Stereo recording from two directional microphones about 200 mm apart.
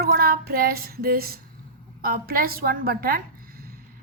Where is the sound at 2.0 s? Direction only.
50° right (ahead or behind).